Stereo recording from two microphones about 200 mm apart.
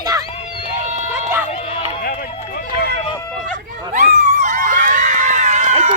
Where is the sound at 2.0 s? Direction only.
45° left (ahead or behind).